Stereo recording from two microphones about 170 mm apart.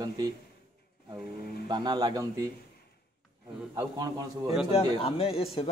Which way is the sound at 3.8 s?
20° right (ahead or behind).